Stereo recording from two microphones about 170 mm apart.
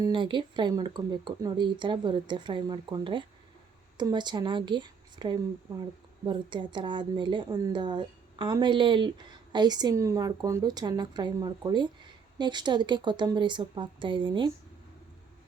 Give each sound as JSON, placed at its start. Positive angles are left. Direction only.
{"t": 0.0, "sound": "speech", "side_deg": -30}